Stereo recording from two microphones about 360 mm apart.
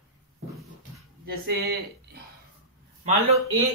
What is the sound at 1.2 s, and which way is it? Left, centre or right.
Speech, right.